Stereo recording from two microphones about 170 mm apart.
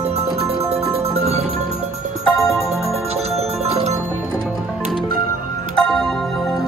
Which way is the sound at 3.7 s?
40° right (ahead or behind).